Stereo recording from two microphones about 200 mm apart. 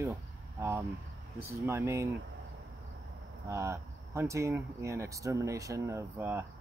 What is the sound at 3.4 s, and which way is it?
Speech, 15° right (ahead or behind).